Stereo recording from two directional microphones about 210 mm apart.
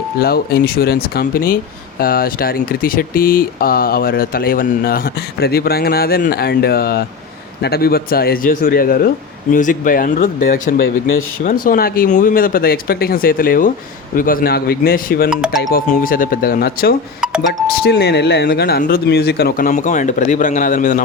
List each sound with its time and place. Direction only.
0.2 s speech: 45° left (ahead or behind)
15.3 s speech: 5° right (ahead or behind)
15.7 s speech: 40° left (ahead or behind)